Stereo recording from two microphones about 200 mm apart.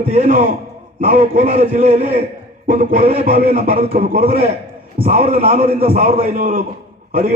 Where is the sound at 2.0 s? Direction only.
45° right (ahead or behind).